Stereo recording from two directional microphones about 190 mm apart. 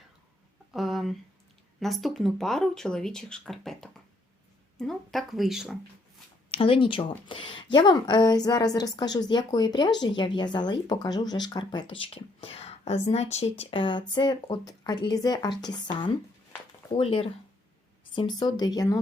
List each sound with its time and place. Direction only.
0.7 s a sound: centre (ahead or behind)
1.8 s speech: centre (ahead or behind)
6.5 s a woman's voice: 30° left (ahead or behind)
17.0 s a woman's voice: 30° left (ahead or behind)